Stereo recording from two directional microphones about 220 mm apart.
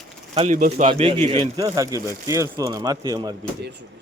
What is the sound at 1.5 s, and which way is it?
Speech, 15° right (ahead or behind).